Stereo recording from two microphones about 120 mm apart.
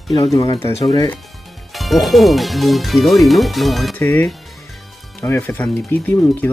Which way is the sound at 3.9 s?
15° left (ahead or behind).